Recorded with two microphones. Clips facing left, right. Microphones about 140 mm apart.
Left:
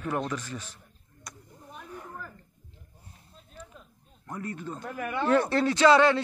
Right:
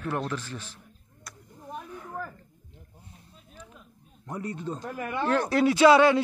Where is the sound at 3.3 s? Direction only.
5° right (ahead or behind).